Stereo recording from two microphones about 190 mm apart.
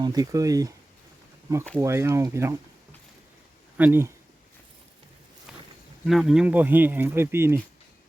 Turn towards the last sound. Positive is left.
turn(degrees=-15)  # may be behind; listen again after turning